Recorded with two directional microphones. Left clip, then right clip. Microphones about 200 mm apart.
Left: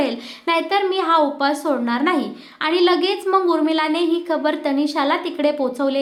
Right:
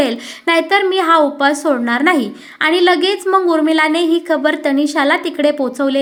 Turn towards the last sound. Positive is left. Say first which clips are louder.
# right 4 dB
turn(degrees=-25)  # may be behind; listen again after turning